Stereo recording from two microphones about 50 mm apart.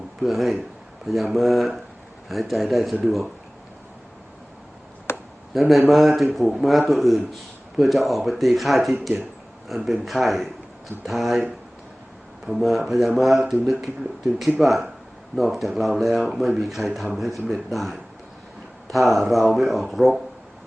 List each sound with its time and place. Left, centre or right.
0.2 s speech: centre
5.1 s a sound: left
5.5 s speech: centre